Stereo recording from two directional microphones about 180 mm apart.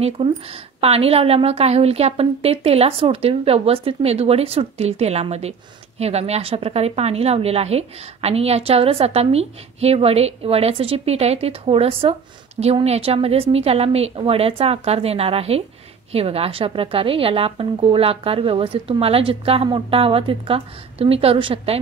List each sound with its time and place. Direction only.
0.2 s a woman's voice: 30° right (ahead or behind)